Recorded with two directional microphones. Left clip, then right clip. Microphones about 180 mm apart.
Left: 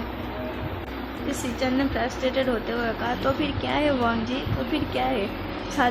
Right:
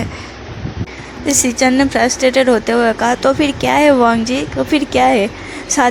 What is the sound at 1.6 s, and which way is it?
A woman's voice, 50° right (ahead or behind).